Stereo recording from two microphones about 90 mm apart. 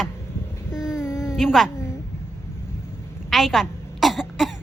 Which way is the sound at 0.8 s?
5° right (ahead or behind).